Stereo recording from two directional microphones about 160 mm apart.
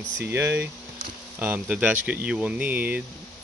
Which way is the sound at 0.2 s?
15° right (ahead or behind).